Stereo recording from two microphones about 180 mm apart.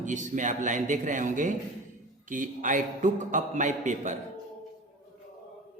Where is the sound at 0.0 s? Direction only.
45° right (ahead or behind).